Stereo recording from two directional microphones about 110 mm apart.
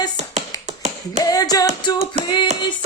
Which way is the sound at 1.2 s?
35° left (ahead or behind).